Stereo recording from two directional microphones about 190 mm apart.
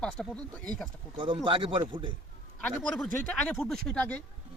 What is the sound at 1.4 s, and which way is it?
Speech, 25° right (ahead or behind).